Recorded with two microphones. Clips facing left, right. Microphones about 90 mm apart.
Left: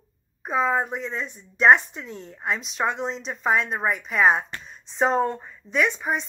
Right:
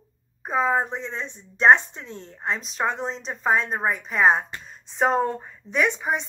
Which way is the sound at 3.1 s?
35° right (ahead or behind).